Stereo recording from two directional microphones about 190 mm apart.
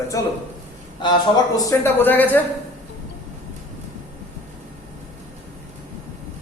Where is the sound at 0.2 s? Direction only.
15° left (ahead or behind).